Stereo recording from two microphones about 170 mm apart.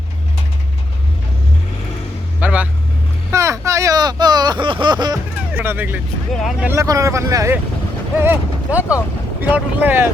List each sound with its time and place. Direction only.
2.4 s vehicle: 10° right (ahead or behind)
3.3 s a sound: 15° right (ahead or behind)
5.5 s speech: 10° right (ahead or behind)
6.3 s speech: centre (ahead or behind)
6.7 s speech: 20° right (ahead or behind)